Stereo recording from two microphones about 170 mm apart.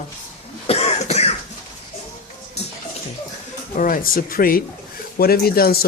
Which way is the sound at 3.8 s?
55° left (ahead or behind).